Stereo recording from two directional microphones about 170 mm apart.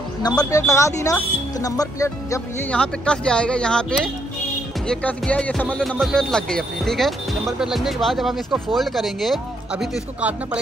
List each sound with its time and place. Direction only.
0.2 s speech: 20° left (ahead or behind)
2.7 s speech: 5° left (ahead or behind)